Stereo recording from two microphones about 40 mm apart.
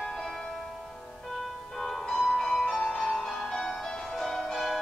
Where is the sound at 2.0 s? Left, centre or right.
Centre.